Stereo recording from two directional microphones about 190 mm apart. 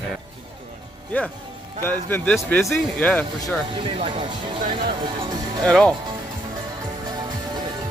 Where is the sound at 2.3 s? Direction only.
Centre (ahead or behind).